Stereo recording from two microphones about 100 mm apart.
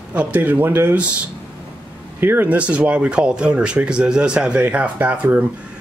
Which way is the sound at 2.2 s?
20° right (ahead or behind).